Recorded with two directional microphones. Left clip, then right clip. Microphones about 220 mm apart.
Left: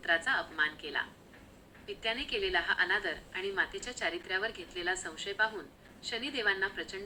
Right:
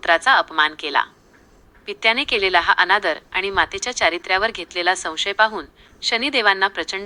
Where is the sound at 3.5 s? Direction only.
40° right (ahead or behind).